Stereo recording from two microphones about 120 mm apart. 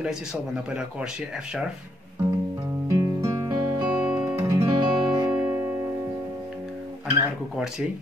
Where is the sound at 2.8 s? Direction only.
25° right (ahead or behind).